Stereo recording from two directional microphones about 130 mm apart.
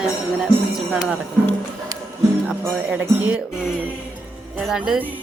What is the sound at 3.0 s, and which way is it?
Speech, 15° right (ahead or behind).